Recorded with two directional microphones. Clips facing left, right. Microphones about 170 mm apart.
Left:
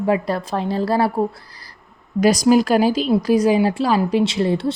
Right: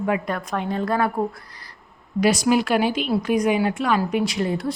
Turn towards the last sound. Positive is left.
turn(degrees=30)  # may be behind; listen again after turning